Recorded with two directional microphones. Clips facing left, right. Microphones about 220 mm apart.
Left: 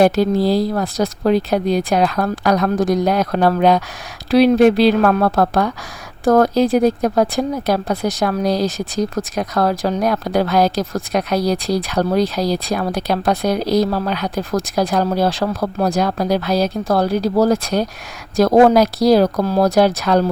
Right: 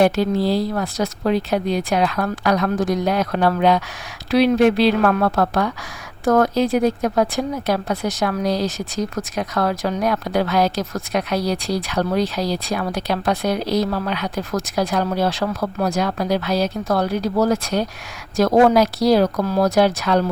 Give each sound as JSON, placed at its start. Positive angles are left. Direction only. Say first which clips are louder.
{"t": 0.0, "sound": "speech", "louder": "left 3 dB", "side_deg": 40}